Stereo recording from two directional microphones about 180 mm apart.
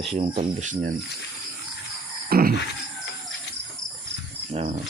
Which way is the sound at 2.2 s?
55° right (ahead or behind).